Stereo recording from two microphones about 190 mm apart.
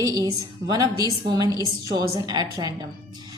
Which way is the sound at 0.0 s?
20° right (ahead or behind).